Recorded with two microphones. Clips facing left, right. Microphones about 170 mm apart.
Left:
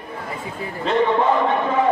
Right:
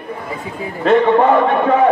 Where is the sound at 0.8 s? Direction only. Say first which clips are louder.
Right 6 dB; 60° right (ahead or behind).